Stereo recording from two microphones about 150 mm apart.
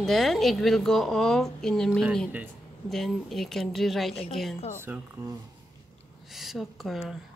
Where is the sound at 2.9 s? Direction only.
Centre (ahead or behind).